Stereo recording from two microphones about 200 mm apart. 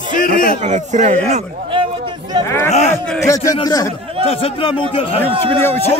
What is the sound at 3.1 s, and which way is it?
Speech, 15° left (ahead or behind).